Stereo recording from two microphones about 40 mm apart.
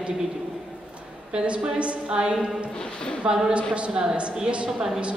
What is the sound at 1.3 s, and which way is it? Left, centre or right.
A woman's voice, right.